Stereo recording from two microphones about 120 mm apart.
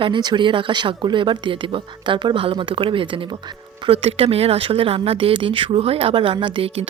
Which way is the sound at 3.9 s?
55° right (ahead or behind).